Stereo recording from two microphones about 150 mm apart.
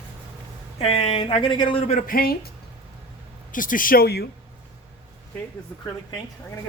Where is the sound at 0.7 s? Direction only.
40° left (ahead or behind).